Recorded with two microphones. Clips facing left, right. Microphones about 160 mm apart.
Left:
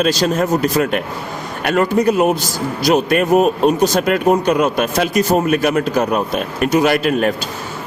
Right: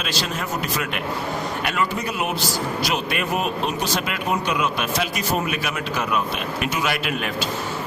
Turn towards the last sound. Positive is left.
turn(degrees=45)  # may be behind; listen again after turning